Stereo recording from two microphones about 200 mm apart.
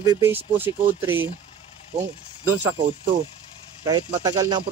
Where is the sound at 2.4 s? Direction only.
10° right (ahead or behind).